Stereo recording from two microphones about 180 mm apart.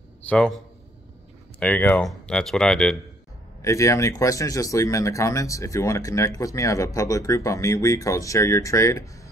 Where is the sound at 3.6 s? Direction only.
15° left (ahead or behind).